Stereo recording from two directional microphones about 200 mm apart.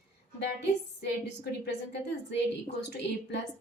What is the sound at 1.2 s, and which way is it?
Speech, 55° left (ahead or behind).